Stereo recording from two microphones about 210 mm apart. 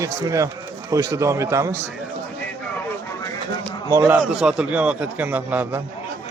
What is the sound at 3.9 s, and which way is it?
A man's voice, 10° right (ahead or behind).